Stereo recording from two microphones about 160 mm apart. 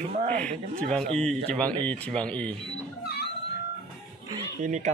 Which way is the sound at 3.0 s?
85° left.